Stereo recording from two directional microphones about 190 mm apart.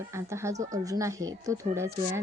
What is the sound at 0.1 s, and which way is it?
Speech, 15° right (ahead or behind).